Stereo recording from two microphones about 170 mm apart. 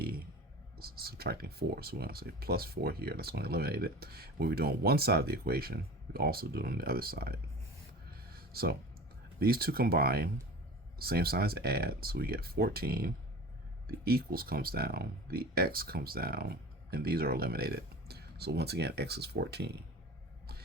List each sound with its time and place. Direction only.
0.8 s speech: 65° right (ahead or behind)
8.4 s a sound: 65° right (ahead or behind)
9.4 s speech: 60° right (ahead or behind); by 19.7 s 75° right (ahead or behind)